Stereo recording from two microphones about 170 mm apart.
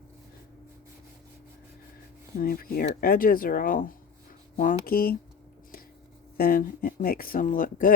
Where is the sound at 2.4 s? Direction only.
60° left (ahead or behind).